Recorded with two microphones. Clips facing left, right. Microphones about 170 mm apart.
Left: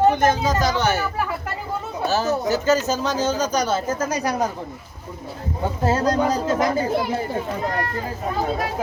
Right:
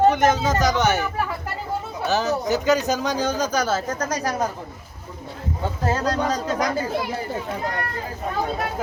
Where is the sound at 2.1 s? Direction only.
20° right (ahead or behind).